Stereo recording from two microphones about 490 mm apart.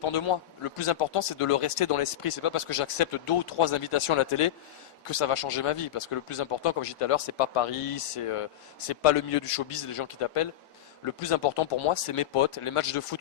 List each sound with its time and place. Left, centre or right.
0.0 s speech: left